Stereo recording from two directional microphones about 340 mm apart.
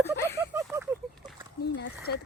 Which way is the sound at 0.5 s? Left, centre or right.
Centre.